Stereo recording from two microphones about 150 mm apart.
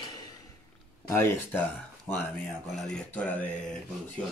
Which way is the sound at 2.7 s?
5° left (ahead or behind).